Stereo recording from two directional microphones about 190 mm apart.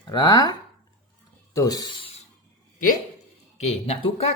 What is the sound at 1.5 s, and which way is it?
Speech, 20° left (ahead or behind).